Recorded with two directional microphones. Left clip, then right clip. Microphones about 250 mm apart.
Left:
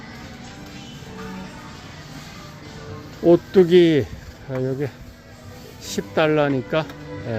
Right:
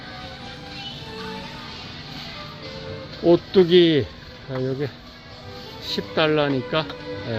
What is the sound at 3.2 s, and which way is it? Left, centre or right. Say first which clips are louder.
Speech: left 2 dB; centre.